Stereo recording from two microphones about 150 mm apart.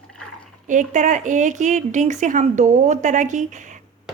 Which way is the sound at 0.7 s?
55° right (ahead or behind).